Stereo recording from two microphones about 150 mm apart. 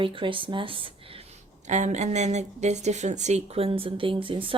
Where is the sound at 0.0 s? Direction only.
35° right (ahead or behind).